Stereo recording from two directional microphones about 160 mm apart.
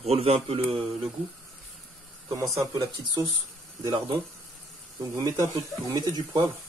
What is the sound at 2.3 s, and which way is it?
Speech, 20° right (ahead or behind).